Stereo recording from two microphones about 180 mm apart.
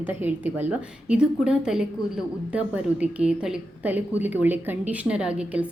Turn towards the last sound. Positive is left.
turn(degrees=-5)  # may be behind; listen again after turning